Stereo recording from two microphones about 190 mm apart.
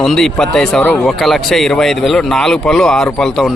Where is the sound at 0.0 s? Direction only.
Centre (ahead or behind).